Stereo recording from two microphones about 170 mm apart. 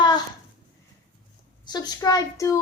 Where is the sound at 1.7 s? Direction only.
25° left (ahead or behind).